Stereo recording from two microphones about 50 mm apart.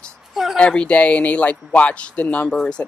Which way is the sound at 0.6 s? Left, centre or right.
Left.